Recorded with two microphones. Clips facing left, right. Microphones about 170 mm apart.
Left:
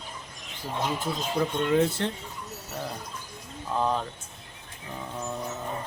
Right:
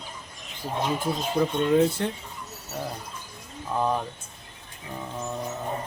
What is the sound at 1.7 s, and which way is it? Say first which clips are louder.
Speech: right 2 dB; 10° right (ahead or behind).